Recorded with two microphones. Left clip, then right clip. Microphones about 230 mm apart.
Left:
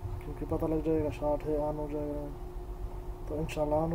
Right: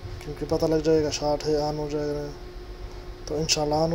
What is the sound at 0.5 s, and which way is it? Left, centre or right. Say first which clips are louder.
Speech: right 9 dB; centre.